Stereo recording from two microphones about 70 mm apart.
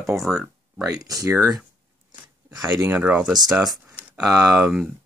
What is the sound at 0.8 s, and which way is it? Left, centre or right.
Speech, right.